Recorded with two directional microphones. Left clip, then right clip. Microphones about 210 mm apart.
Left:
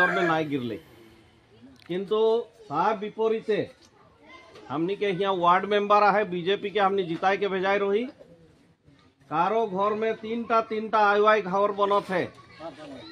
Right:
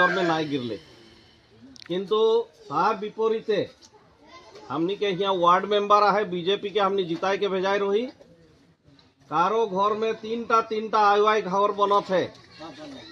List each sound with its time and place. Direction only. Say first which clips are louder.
0.0 s speech: right 1 dB; 15° left (ahead or behind)
1.8 s a man's voice: right 2 dB; 20° left (ahead or behind)
4.6 s a man's voice: right 1 dB; 20° left (ahead or behind)
9.3 s a man's voice: right 2 dB; 20° left (ahead or behind)